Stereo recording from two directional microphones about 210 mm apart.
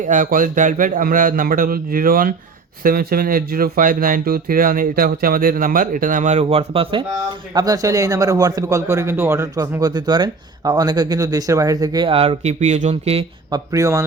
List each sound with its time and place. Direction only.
0.1 s a man's voice: 40° right (ahead or behind)
7.5 s speech: 15° right (ahead or behind)
13.7 s speech: 15° right (ahead or behind)